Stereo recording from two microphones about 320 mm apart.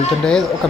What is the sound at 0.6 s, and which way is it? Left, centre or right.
Speech, centre.